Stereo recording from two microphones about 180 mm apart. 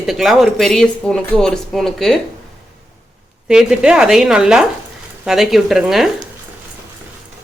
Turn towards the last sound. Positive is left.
turn(degrees=0)  # may be behind; listen again after turning